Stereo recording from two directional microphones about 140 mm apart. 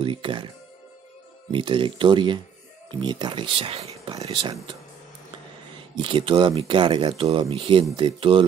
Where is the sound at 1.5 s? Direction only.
35° right (ahead or behind).